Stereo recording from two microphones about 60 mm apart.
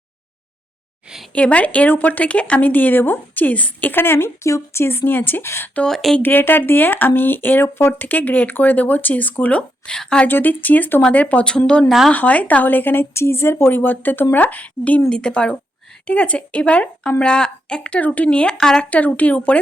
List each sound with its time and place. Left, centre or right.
1.3 s a woman's voice: left
4.4 s a woman's voice: left
5.9 s speech: centre
6.2 s speech: left
8.0 s a woman's voice: left
10.2 s speech: left; by 11.9 s centre
12.1 s a woman's voice: left; by 18.9 s centre
18.9 s a woman's voice: left